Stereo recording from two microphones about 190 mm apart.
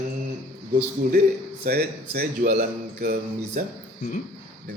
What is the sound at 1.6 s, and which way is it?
Speech, 55° right (ahead or behind).